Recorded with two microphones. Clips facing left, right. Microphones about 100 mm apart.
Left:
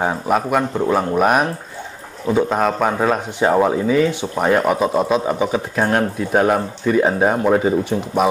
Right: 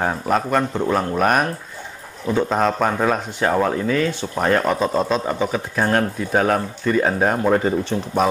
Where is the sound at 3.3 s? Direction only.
15° left (ahead or behind).